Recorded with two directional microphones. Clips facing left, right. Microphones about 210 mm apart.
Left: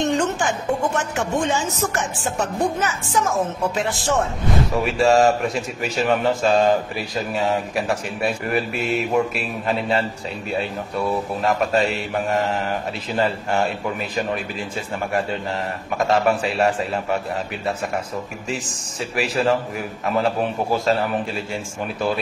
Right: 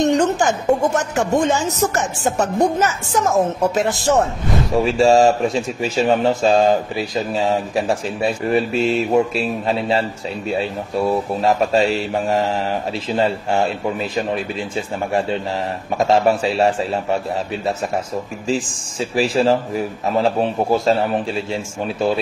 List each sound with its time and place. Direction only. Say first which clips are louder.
0.0 s speech: right 5 dB; 40° right (ahead or behind)
5.0 s speech: right 2 dB; 30° right (ahead or behind)
11.4 s speech: right 3 dB; 35° right (ahead or behind)
16.1 s speech: right 3 dB; 30° right (ahead or behind)
19.1 s speech: right 4 dB; 30° right (ahead or behind)